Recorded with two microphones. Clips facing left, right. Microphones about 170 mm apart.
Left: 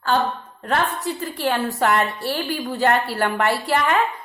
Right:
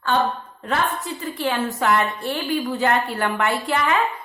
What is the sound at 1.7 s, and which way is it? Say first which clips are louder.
Speech: left 1 dB; 65° left (ahead or behind).